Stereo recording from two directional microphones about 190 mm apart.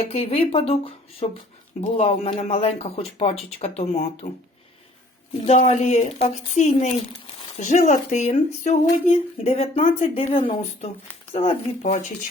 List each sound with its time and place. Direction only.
0.0 s speech: 30° left (ahead or behind)
5.5 s speech: 35° left (ahead or behind)